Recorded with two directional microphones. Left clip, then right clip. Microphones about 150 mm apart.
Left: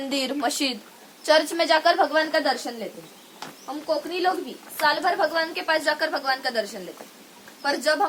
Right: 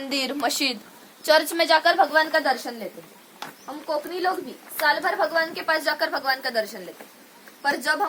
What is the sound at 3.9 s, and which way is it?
A woman's voice, 15° right (ahead or behind).